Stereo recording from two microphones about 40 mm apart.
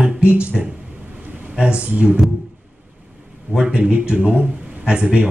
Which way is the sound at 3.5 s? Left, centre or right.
Right.